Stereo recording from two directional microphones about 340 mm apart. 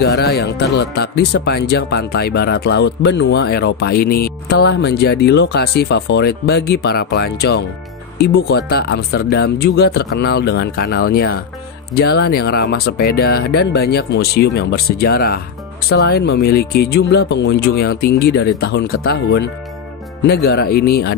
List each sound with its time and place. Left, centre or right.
0.0 s speech: left